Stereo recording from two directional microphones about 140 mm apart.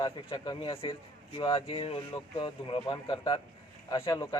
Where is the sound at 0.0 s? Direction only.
30° left (ahead or behind).